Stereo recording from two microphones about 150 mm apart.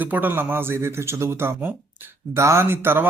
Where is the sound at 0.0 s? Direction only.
10° right (ahead or behind).